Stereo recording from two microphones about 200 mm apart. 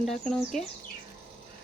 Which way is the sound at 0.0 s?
Centre (ahead or behind).